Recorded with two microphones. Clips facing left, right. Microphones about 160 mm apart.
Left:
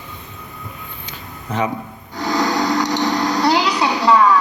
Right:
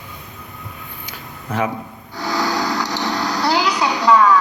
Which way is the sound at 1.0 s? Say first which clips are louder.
Even; 5° right (ahead or behind).